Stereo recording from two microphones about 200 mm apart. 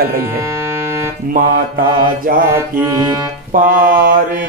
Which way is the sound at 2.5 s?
15° right (ahead or behind).